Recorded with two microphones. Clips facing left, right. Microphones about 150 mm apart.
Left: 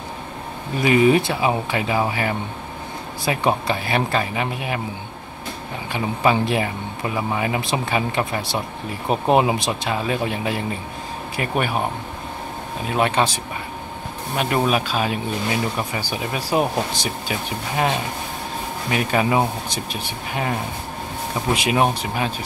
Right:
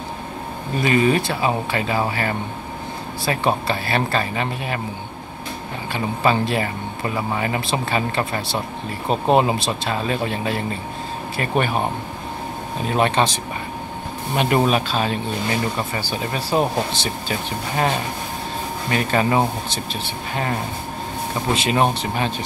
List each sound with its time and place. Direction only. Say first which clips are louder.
0.8 s speech: left 3 dB; 15° left (ahead or behind)
5.9 s speech: even; 15° left (ahead or behind)
12.9 s speech: right 1 dB; 10° left (ahead or behind)
14.8 s speech: right 1 dB; 10° left (ahead or behind)
21.5 s speech: even; 10° left (ahead or behind)